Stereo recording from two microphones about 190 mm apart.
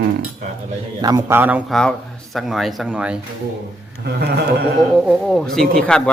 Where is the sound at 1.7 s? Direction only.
5° left (ahead or behind).